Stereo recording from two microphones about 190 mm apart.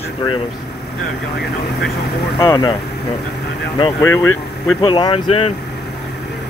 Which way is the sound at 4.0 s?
15° left (ahead or behind).